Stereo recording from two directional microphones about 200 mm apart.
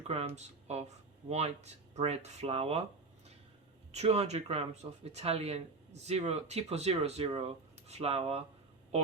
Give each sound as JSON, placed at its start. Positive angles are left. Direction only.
{"t": 0.1, "sound": "speech", "side_deg": -30}
{"t": 3.9, "sound": "speech", "side_deg": -30}